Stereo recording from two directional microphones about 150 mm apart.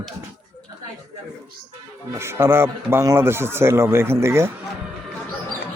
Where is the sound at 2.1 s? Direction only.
15° right (ahead or behind).